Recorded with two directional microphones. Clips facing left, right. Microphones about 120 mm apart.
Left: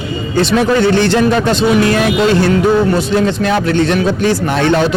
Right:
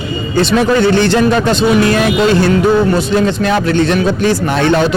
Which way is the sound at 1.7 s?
20° right (ahead or behind).